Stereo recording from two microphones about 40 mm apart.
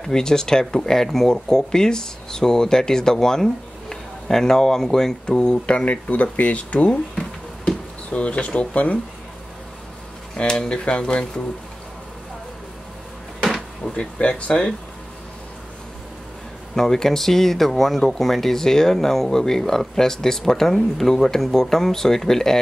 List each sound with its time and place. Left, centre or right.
0.0 s speech: centre; by 9.0 s left
10.3 s speech: centre
13.9 s speech: left
16.7 s speech: centre